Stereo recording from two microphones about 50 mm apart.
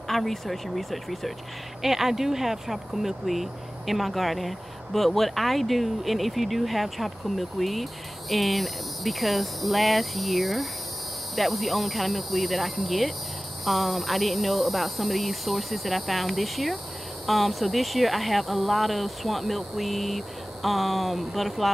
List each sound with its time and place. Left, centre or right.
0.1 s speech: centre